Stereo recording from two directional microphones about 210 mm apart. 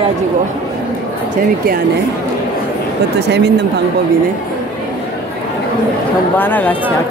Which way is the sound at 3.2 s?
55° right (ahead or behind).